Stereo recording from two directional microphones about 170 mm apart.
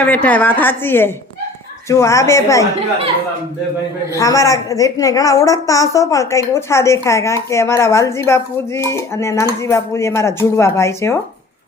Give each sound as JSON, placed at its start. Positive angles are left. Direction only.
{"t": 0.0, "sound": "a woman's voice", "side_deg": 10}
{"t": 4.1, "sound": "a woman's voice", "side_deg": 20}